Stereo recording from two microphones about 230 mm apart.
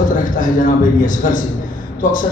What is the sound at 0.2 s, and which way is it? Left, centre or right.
A man's voice, left.